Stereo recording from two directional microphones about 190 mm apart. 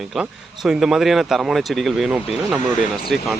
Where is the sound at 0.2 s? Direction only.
Centre (ahead or behind).